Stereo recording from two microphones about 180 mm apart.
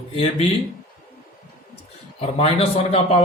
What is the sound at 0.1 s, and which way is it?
Speech, 30° left (ahead or behind).